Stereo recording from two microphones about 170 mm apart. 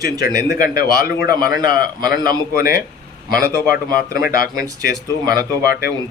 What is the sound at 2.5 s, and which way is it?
Speech, 55° left (ahead or behind).